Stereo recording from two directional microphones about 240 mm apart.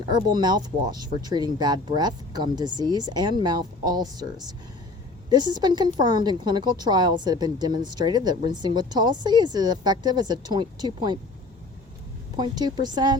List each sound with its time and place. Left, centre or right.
0.1 s speech: centre
12.4 s speech: centre